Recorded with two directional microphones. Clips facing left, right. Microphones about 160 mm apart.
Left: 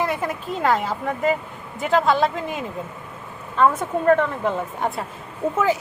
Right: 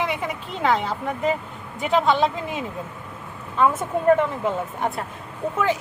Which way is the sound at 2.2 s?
25° right (ahead or behind).